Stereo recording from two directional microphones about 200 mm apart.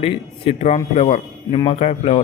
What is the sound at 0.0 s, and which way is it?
A man's voice, 30° left (ahead or behind).